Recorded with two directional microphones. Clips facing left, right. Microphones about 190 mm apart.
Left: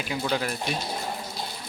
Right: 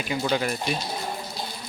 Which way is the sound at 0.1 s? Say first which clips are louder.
Right 3 dB; 5° right (ahead or behind).